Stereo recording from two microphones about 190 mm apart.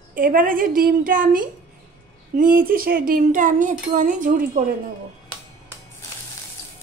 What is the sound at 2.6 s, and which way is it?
Speech, 50° right (ahead or behind).